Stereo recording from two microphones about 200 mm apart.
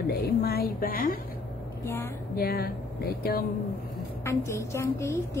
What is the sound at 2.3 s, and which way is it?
A woman's voice, 50° left (ahead or behind).